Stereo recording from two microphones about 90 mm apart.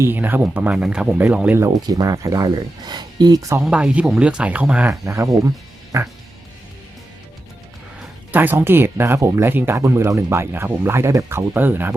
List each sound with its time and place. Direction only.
0.0 s speech: 25° right (ahead or behind)
1.5 s speech: 40° right (ahead or behind)
2.8 s speech: 50° right (ahead or behind)
3.6 s speech: 10° right (ahead or behind)
5.0 s speech: 35° right (ahead or behind)
8.3 s speech: 20° right (ahead or behind)